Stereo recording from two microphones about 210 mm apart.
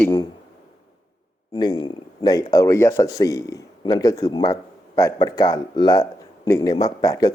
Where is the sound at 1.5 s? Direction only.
20° left (ahead or behind).